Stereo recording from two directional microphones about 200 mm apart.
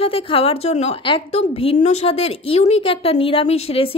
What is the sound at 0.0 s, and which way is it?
A woman's voice, 25° left (ahead or behind).